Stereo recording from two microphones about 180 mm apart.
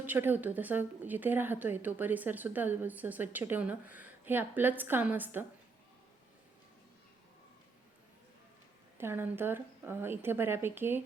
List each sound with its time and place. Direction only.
0.0 s a woman's voice: 10° right (ahead or behind)
9.0 s a woman's voice: 10° right (ahead or behind)